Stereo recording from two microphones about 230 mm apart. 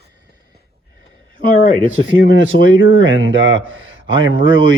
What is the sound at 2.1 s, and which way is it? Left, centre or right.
Speech, left.